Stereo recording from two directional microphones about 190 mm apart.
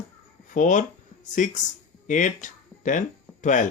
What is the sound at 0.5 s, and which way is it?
Speech, 40° left (ahead or behind).